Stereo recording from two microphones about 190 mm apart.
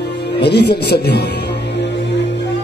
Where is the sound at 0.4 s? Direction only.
60° left (ahead or behind).